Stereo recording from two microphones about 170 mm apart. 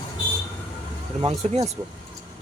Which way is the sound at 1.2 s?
30° right (ahead or behind).